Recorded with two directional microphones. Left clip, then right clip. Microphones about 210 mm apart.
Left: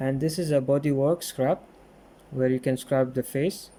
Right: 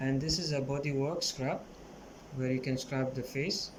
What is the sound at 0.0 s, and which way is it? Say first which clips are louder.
Speech: left 6 dB; 40° left (ahead or behind).